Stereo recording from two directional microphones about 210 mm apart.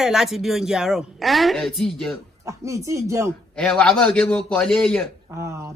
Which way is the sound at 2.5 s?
15° right (ahead or behind).